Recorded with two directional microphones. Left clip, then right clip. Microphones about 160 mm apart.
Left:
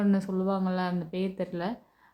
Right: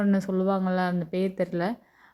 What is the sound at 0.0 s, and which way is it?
A woman's voice, 25° right (ahead or behind).